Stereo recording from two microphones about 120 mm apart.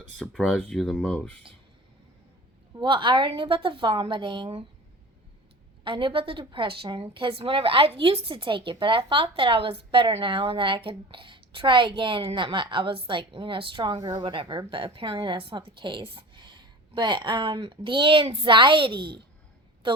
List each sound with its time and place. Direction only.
0.2 s speech: 5° left (ahead or behind)
2.8 s a woman's voice: 45° right (ahead or behind)
5.8 s a woman's voice: 45° right (ahead or behind)